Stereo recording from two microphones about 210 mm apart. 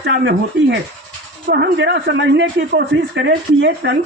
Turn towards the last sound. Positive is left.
turn(degrees=-55)  # may be behind; listen again after turning